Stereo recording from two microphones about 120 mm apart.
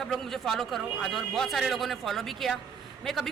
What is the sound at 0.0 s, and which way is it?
Speech, centre (ahead or behind).